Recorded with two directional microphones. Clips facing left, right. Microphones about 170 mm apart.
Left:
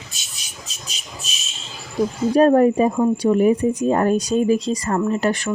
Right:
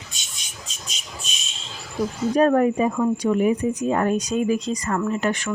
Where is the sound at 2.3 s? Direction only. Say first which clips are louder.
Left 4 dB; 30° left (ahead or behind).